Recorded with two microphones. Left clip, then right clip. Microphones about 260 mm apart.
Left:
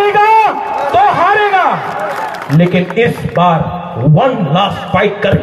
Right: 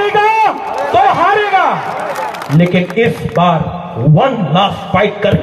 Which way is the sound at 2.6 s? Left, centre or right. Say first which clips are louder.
Left 1 dB; left.